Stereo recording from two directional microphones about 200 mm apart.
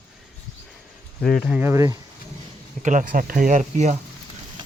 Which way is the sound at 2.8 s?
40° right (ahead or behind).